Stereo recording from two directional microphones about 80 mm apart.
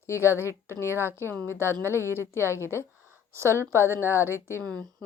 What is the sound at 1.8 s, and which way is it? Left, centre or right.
Speech, right.